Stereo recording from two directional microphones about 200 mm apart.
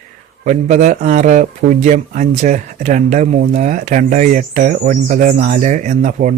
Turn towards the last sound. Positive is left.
turn(degrees=-40)  # may be behind; listen again after turning